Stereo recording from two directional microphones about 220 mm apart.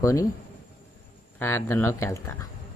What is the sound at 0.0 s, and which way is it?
Speech, 15° left (ahead or behind).